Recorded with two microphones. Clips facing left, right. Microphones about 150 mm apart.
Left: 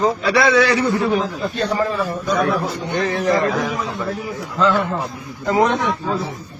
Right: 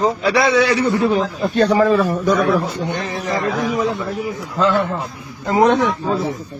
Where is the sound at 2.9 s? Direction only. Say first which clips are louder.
Left 4 dB; centre (ahead or behind).